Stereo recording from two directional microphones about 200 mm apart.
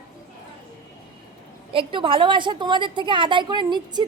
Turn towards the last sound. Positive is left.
turn(degrees=-20)  # may be behind; listen again after turning